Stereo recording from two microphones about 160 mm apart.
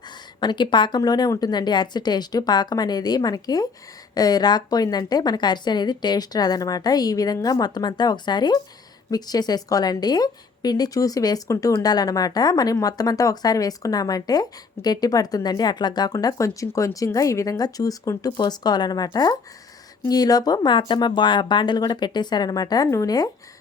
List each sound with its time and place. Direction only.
0.3 s a woman's voice: 30° left (ahead or behind)